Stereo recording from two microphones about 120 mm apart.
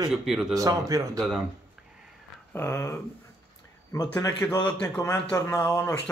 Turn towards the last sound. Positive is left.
turn(degrees=25)  # may be behind; listen again after turning